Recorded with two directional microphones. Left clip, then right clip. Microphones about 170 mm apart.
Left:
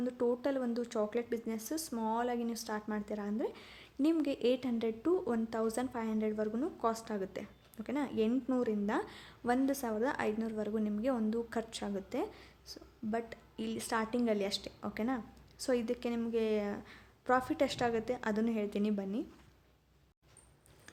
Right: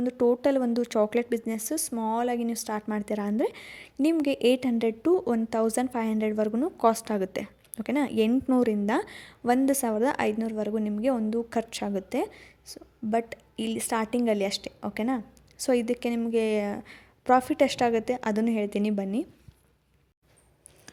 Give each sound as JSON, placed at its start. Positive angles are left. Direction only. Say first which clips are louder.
{"t": 0.0, "sound": "a woman's voice", "louder": "right 10 dB", "side_deg": -35}